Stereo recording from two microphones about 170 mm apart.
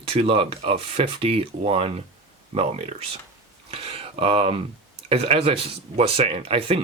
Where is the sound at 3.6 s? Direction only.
35° right (ahead or behind).